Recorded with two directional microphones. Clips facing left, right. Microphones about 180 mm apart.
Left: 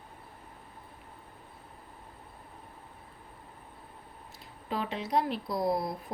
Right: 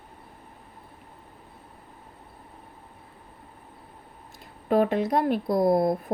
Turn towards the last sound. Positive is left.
turn(degrees=-55)  # may be behind; listen again after turning